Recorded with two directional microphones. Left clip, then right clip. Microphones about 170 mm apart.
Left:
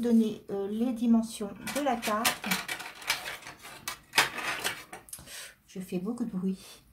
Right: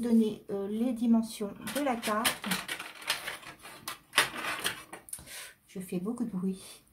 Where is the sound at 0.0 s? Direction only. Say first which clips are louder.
Left 1 dB; 10° right (ahead or behind).